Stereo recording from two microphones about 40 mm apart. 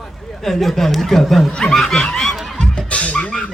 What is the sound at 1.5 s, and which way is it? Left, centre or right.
Snicker, centre.